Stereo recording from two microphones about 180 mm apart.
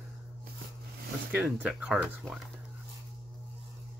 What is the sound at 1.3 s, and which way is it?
Speech, 5° right (ahead or behind).